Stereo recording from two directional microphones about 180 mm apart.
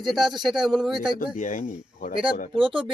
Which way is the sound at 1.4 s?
45° left (ahead or behind).